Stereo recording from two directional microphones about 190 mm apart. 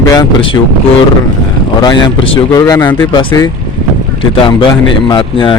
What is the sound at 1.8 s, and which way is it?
Speech, 25° left (ahead or behind).